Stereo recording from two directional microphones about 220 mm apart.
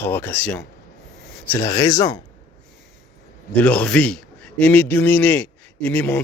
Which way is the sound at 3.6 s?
5° left (ahead or behind).